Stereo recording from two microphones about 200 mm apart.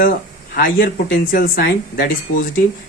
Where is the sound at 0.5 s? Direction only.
50° left (ahead or behind).